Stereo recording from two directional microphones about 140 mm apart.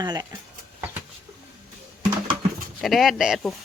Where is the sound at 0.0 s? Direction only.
30° right (ahead or behind).